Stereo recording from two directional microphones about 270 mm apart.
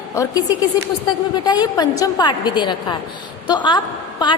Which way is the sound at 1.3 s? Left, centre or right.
Centre.